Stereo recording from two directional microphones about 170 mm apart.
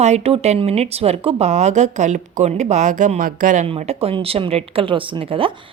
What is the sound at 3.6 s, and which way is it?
A woman's voice, 35° right (ahead or behind).